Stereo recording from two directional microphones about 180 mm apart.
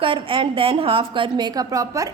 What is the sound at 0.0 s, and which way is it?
A woman's voice, 30° right (ahead or behind).